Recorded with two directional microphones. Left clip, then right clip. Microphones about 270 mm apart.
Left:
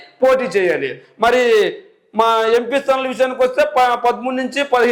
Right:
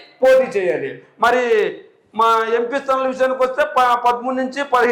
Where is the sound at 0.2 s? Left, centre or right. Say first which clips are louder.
Right 1 dB; left.